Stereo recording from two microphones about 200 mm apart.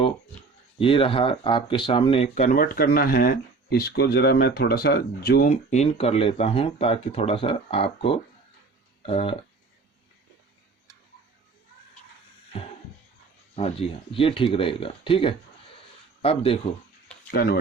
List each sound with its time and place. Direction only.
0.8 s speech: 25° left (ahead or behind)
12.5 s music: 30° left (ahead or behind)
13.6 s speech: 30° left (ahead or behind)
17.3 s speech: 50° left (ahead or behind)